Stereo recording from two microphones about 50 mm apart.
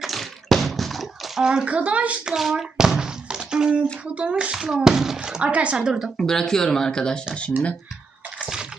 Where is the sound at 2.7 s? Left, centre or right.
Centre.